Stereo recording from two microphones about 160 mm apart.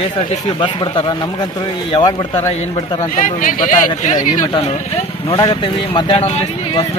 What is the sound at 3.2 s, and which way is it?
Speech, 55° left (ahead or behind).